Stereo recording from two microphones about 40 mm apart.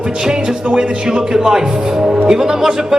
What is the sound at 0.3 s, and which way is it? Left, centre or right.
A man's voice, centre.